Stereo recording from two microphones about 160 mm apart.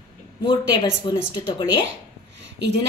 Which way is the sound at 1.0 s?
30° left (ahead or behind).